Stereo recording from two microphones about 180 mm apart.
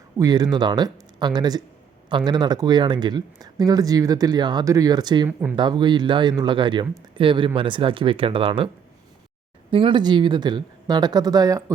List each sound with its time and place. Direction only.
0.2 s speech: 20° right (ahead or behind)
9.7 s speech: 25° right (ahead or behind)